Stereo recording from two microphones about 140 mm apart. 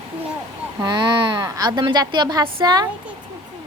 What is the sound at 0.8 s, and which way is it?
A woman's voice, 35° right (ahead or behind).